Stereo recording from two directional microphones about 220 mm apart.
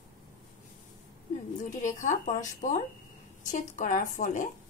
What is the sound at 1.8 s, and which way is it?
Speech, 35° left (ahead or behind).